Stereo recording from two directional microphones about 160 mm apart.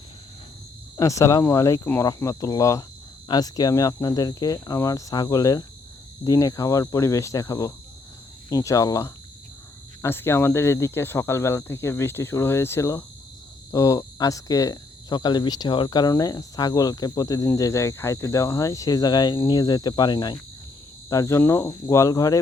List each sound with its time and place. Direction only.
0.9 s speech: 20° left (ahead or behind)